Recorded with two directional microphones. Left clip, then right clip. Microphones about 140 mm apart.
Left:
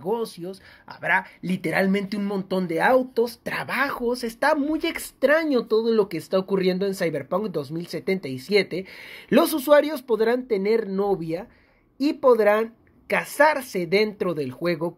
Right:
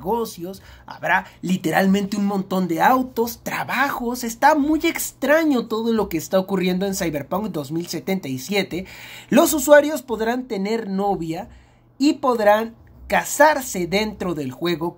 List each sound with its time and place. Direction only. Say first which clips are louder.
0.0 s speech: right 3 dB; 40° left (ahead or behind)